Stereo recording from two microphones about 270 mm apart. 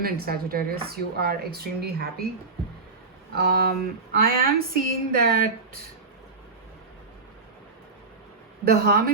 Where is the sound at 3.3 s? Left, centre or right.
Right.